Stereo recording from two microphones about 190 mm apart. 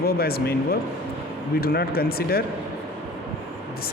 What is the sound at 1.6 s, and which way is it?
Speech, 55° left (ahead or behind).